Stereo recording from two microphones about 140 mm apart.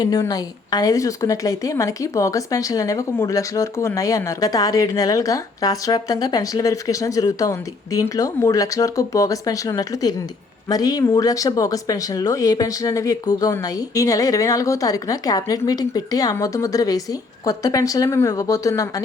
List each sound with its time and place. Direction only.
0.0 s a woman's voice: 30° left (ahead or behind)